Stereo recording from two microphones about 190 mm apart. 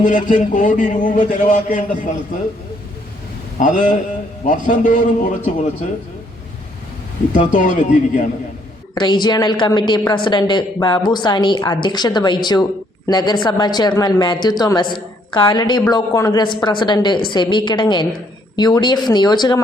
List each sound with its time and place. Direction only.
0.0 s a man's voice: 40° left (ahead or behind)
3.6 s a man's voice: 40° left (ahead or behind)
7.3 s a man's voice: 40° left (ahead or behind)
9.0 s a woman's voice: 20° left (ahead or behind)